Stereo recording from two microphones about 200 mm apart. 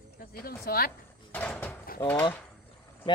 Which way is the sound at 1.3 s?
10° left (ahead or behind).